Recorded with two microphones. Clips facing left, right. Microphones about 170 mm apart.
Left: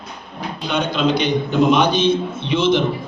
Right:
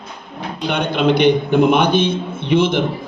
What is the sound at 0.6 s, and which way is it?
A man's voice, 60° right (ahead or behind).